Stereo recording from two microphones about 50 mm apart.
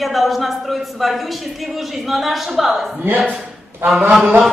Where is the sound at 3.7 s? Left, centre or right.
Right.